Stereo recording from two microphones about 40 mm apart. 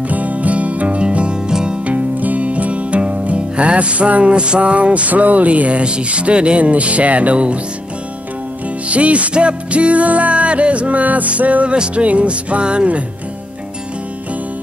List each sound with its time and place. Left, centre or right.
0.1 s music: right; by 1.8 s centre
1.9 s music: right
8.8 s music: right